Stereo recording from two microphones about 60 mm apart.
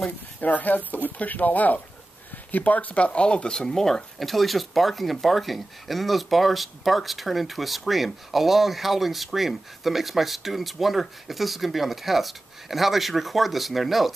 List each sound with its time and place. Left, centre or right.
0.4 s speech: left; by 14.1 s centre